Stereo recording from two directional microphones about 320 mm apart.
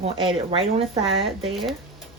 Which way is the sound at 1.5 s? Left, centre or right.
Centre.